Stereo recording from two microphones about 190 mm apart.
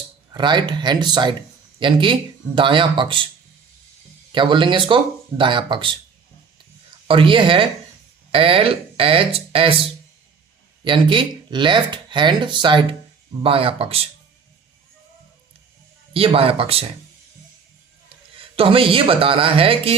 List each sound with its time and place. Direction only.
0.3 s speech: 25° right (ahead or behind)
4.3 s speech: 25° right (ahead or behind)
7.1 s speech: 25° right (ahead or behind)
10.8 s speech: 25° right (ahead or behind)
16.1 s speech: 30° right (ahead or behind)
18.3 s speech: 30° right (ahead or behind)